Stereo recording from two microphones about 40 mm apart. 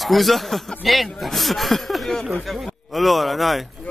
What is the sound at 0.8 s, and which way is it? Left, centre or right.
Speech, centre.